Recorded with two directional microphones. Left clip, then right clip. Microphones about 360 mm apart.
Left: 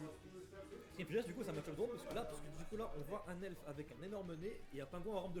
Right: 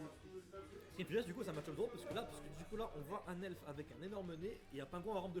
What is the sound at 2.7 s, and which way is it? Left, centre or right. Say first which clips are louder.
Speech: even; right.